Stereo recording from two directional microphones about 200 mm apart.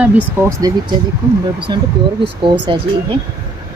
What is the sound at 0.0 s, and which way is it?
Speech, 10° right (ahead or behind).